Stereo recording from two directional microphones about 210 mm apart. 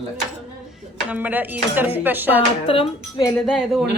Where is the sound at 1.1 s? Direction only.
10° right (ahead or behind).